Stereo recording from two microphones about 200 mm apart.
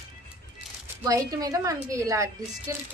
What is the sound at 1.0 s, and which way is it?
A woman's voice, 15° right (ahead or behind).